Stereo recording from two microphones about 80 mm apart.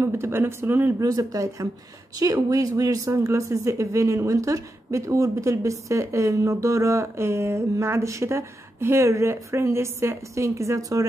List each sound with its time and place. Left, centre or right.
0.0 s speech: right
1.0 s speech: right